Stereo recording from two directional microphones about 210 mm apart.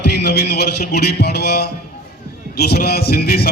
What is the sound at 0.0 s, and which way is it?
A man's voice, 55° left (ahead or behind).